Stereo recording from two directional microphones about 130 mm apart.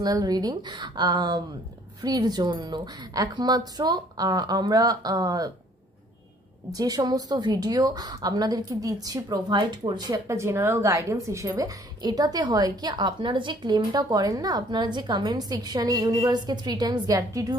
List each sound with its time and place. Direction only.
0.0 s a woman's voice: 30° right (ahead or behind)
6.7 s a woman's voice: 30° right (ahead or behind)